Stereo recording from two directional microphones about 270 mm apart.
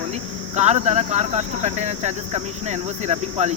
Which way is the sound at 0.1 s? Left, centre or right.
Right.